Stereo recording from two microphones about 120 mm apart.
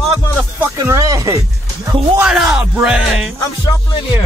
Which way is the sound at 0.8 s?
25° right (ahead or behind).